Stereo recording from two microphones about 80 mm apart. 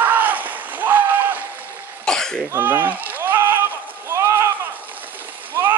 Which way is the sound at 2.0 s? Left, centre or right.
Centre.